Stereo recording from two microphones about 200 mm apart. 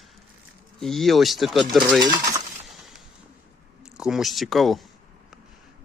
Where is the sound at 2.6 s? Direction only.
Centre (ahead or behind).